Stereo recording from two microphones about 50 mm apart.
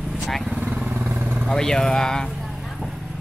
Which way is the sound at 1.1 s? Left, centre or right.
Right.